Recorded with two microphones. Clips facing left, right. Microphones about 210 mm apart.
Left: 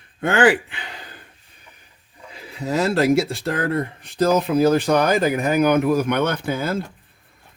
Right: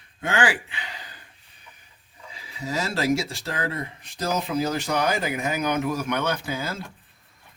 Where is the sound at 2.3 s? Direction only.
60° left (ahead or behind).